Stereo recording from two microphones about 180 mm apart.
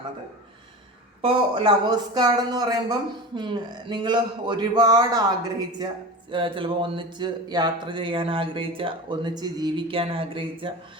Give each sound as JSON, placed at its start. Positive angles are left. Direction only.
{"t": 1.2, "sound": "speech", "side_deg": -30}